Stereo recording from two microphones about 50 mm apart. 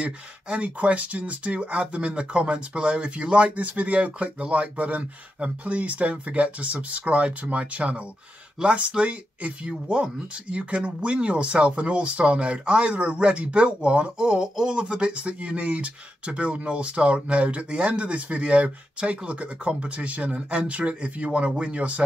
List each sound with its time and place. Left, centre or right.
0.0 s speech: right